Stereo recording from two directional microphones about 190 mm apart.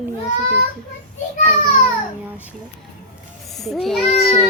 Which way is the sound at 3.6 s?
Centre (ahead or behind).